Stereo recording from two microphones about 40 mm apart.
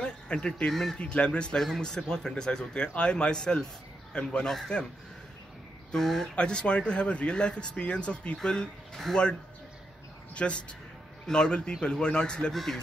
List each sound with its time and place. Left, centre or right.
0.0 s speech: left
5.9 s speech: centre
6.3 s speech: left